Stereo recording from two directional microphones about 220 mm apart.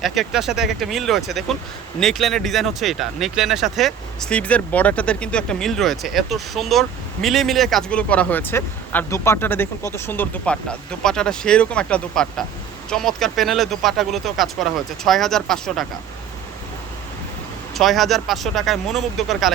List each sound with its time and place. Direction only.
0.0 s speech: centre (ahead or behind)
17.7 s speech: centre (ahead or behind)